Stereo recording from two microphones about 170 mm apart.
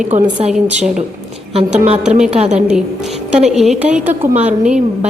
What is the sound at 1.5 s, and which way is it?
A woman's voice, 40° right (ahead or behind).